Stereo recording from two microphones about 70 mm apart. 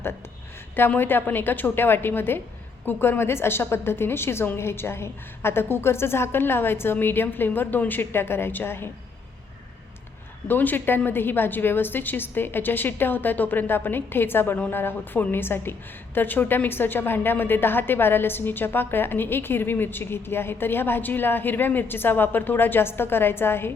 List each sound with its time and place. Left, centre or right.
0.8 s a woman's voice: left
10.5 s a woman's voice: left